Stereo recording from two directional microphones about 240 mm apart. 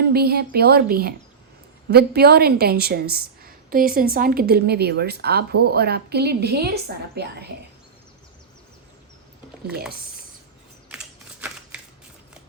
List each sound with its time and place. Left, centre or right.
0.0 s a woman's voice: right
10.8 s typewriter: centre